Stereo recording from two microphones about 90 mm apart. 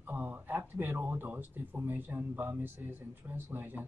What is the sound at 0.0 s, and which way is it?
Speech, 20° right (ahead or behind).